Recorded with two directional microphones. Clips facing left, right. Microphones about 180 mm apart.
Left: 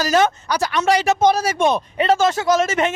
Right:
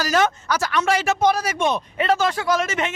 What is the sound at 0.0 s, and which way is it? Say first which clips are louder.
Speech: left 3 dB; 25° left (ahead or behind).